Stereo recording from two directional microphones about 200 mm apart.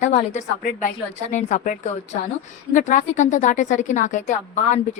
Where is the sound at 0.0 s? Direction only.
35° left (ahead or behind).